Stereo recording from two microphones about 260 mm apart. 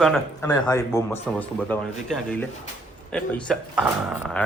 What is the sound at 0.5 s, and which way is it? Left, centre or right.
Speech, centre.